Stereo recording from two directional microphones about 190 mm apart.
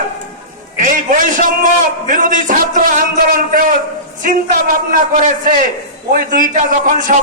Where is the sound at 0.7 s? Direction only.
40° right (ahead or behind).